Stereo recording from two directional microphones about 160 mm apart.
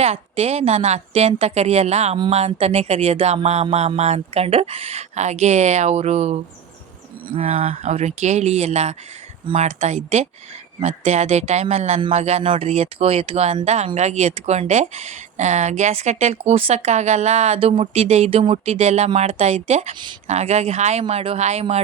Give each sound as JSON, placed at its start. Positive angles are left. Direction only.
{"t": 0.0, "sound": "music", "side_deg": -40}
{"t": 7.3, "sound": "speech", "side_deg": -40}
{"t": 12.1, "sound": "music", "side_deg": -45}
{"t": 13.7, "sound": "speech", "side_deg": -45}
{"t": 21.0, "sound": "music", "side_deg": -40}